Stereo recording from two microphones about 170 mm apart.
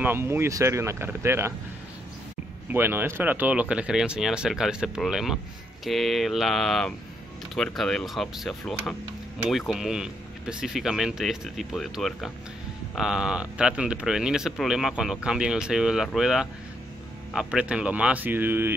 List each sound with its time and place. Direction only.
0.0 s speech: 15° right (ahead or behind)
2.7 s speech: 10° right (ahead or behind)